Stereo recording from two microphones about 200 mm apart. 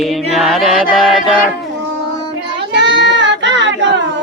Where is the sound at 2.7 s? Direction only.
60° right (ahead or behind).